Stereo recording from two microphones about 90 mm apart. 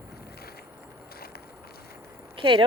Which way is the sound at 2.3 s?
65° right (ahead or behind).